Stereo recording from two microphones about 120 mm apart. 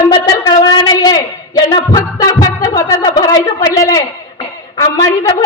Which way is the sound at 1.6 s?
35° left (ahead or behind).